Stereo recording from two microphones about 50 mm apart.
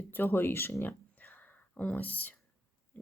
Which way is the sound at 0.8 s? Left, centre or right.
Left.